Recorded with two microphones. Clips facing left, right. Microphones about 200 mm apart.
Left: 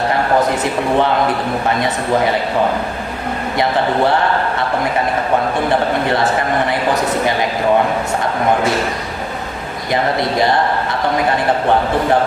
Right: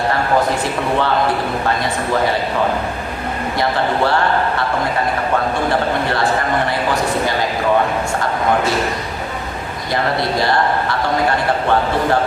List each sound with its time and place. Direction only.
0.6 s speech: 20° left (ahead or behind)
9.9 s speech: 20° left (ahead or behind)